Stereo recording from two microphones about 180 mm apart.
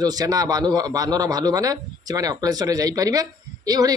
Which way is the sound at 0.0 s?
20° right (ahead or behind).